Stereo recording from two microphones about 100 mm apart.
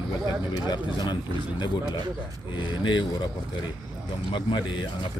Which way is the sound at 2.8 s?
50° left (ahead or behind).